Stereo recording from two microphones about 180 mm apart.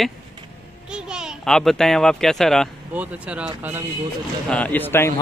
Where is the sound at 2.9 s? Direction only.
10° right (ahead or behind).